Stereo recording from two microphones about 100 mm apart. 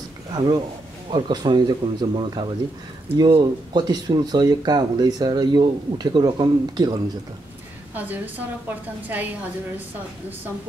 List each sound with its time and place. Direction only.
0.3 s speech: 45° right (ahead or behind)
7.9 s a woman's voice: 15° right (ahead or behind)